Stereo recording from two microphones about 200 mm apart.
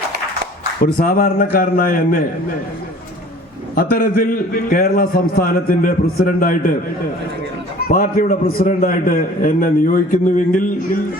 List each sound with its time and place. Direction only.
0.9 s a man's voice: 45° left (ahead or behind)
3.8 s a man's voice: 45° left (ahead or behind)
7.9 s a man's voice: 45° left (ahead or behind)